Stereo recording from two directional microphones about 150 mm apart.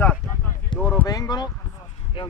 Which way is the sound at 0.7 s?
30° left (ahead or behind).